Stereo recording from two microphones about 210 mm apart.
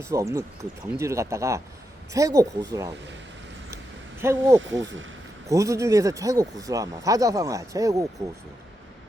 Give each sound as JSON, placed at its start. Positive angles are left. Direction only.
{"t": 0.0, "sound": "speech", "side_deg": -15}
{"t": 4.2, "sound": "speech", "side_deg": -15}
{"t": 4.6, "sound": "speech", "side_deg": -60}
{"t": 5.5, "sound": "speech", "side_deg": -15}